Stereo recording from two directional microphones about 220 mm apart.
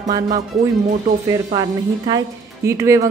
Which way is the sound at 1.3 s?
20° right (ahead or behind).